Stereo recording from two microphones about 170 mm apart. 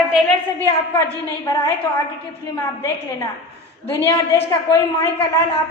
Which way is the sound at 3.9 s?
15° left (ahead or behind).